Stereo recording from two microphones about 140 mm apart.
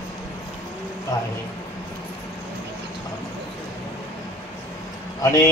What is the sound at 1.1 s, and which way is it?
Speech, 25° left (ahead or behind).